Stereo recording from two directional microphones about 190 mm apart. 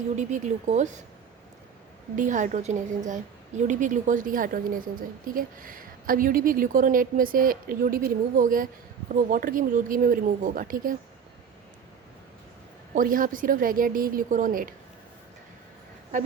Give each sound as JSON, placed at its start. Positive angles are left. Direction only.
{"t": 0.2, "sound": "a woman's voice", "side_deg": -40}
{"t": 2.1, "sound": "a woman's voice", "side_deg": -40}
{"t": 12.9, "sound": "a woman's voice", "side_deg": -45}